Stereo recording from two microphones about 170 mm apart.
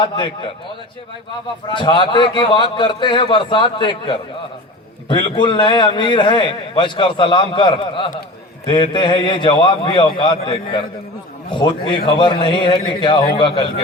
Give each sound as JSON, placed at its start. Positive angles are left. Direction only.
{"t": 0.0, "sound": "a man's voice", "side_deg": 30}
{"t": 1.7, "sound": "a man's voice", "side_deg": 30}